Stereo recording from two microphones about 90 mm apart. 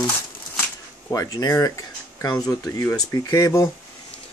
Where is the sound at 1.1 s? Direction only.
35° left (ahead or behind).